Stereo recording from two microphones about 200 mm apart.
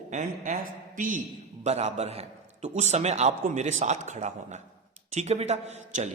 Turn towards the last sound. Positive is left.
turn(degrees=-35)  # may be behind; listen again after turning